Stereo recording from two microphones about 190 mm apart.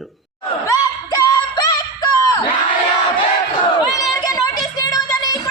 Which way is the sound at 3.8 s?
20° left (ahead or behind).